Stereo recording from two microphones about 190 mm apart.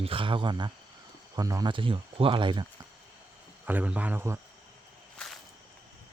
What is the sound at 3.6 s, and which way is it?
Speech, 10° right (ahead or behind).